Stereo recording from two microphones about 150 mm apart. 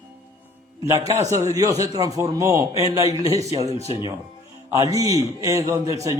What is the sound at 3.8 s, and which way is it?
Speech, 40° left (ahead or behind).